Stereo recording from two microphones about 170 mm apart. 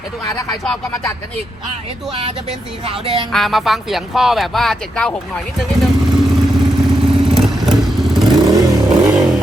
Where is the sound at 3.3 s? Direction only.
Centre (ahead or behind).